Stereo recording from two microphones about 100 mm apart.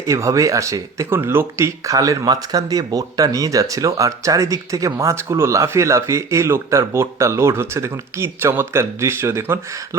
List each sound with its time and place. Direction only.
0.1 s speech: 30° right (ahead or behind)